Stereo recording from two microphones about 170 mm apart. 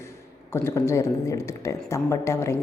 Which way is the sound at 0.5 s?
15° left (ahead or behind).